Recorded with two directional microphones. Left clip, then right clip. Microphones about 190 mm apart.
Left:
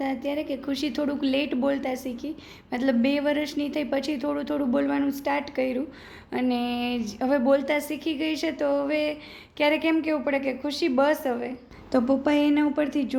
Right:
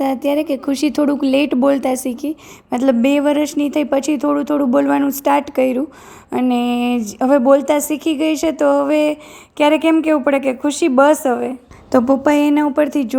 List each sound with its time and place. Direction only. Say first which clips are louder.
0.0 s speech: right 11 dB; 45° right (ahead or behind)